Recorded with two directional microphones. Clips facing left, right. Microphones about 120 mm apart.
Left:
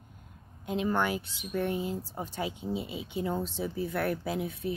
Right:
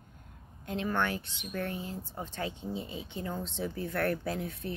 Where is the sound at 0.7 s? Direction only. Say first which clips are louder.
Left 3 dB; 15° left (ahead or behind).